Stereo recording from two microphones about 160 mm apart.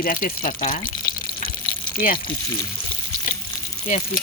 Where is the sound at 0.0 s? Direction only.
60° left (ahead or behind).